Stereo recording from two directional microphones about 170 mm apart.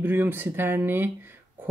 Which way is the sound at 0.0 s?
10° right (ahead or behind).